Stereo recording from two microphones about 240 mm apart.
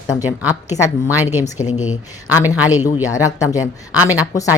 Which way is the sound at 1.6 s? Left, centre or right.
Left.